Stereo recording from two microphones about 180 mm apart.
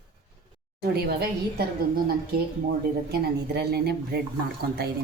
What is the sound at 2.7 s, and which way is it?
Chopping, 65° right (ahead or behind).